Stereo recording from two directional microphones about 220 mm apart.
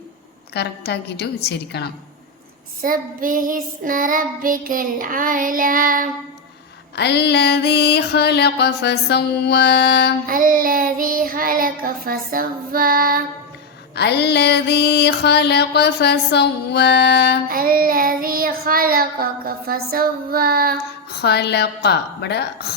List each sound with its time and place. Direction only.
0.5 s music: 50° left (ahead or behind)
2.8 s child singing: 40° right (ahead or behind)
6.9 s music: 50° left (ahead or behind)
10.2 s child singing: 40° right (ahead or behind)
13.9 s music: 50° left (ahead or behind)
17.5 s child singing: 40° right (ahead or behind)
21.1 s music: 50° left (ahead or behind)